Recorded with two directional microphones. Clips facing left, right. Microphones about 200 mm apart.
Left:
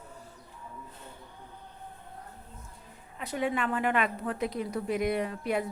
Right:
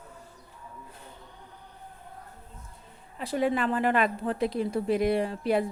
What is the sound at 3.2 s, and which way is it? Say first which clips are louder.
Speech: right 4 dB; 35° right (ahead or behind).